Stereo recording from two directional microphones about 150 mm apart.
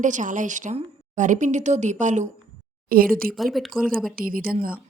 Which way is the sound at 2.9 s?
80° right.